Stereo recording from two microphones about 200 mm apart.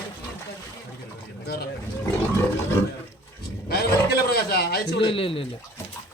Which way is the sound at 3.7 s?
50° left (ahead or behind).